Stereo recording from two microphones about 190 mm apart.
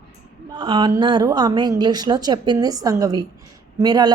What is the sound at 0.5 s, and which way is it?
Speech, 25° right (ahead or behind).